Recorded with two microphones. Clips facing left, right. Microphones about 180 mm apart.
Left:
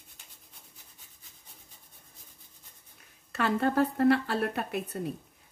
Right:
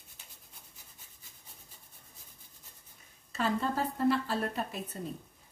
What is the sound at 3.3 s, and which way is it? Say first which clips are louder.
Speech: left 4 dB; 65° left (ahead or behind).